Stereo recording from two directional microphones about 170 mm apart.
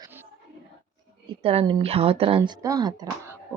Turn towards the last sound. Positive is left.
turn(degrees=-20)  # may be behind; listen again after turning